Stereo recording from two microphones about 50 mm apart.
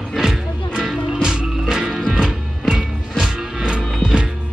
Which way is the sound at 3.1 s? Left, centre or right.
Centre.